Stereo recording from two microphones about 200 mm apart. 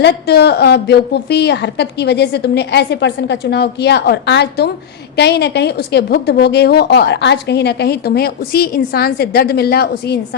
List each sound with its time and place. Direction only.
0.0 s a woman's voice: 55° left (ahead or behind)